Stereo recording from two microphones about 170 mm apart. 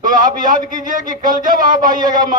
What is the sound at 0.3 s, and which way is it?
A man's voice, 50° right (ahead or behind).